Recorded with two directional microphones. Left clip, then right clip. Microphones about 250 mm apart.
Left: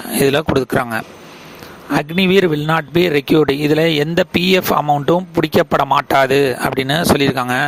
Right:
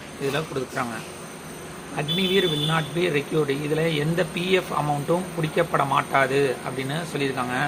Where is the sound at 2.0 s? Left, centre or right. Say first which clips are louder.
Left 8 dB; left.